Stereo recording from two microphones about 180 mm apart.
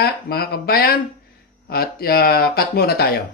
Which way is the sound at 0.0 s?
60° left (ahead or behind).